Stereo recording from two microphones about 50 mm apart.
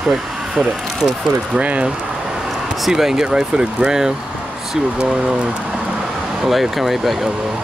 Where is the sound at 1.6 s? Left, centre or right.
Right.